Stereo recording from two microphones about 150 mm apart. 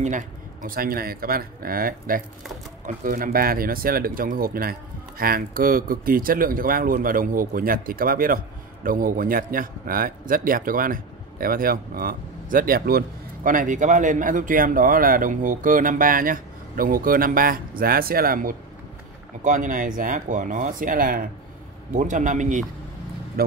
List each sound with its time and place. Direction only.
0.0 s a man's voice: 60° right (ahead or behind)
21.9 s speech: 55° right (ahead or behind)
23.4 s speech: 90° right